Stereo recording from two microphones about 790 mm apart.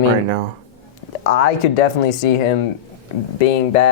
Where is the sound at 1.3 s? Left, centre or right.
Left.